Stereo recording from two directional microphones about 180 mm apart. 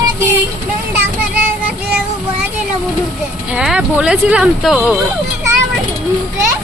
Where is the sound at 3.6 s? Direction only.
5° right (ahead or behind).